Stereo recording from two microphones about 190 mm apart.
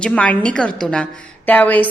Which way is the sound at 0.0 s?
5° left (ahead or behind).